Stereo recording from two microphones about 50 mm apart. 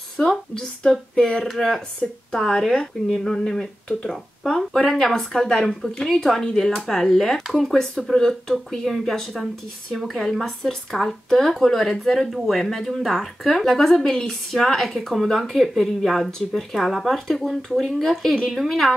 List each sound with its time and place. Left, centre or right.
0.2 s a woman's voice: left; by 18.9 s centre